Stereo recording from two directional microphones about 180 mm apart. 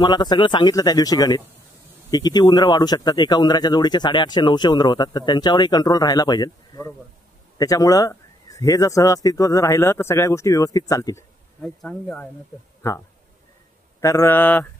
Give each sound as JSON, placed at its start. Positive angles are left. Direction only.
{"t": 0.0, "sound": "speech", "side_deg": 25}
{"t": 11.6, "sound": "speech", "side_deg": 0}
{"t": 14.0, "sound": "speech", "side_deg": 15}